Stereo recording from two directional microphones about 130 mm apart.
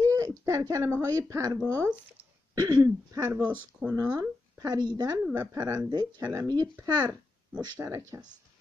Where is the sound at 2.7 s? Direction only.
15° right (ahead or behind); by 5.2 s 30° right (ahead or behind).